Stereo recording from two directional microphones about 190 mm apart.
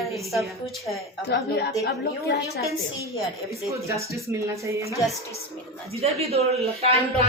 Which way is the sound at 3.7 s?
15° right (ahead or behind).